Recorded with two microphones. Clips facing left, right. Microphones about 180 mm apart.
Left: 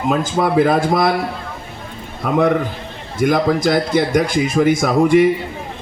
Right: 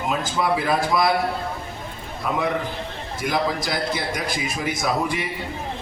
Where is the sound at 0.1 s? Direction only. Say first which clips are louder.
Left 6 dB; 50° left (ahead or behind).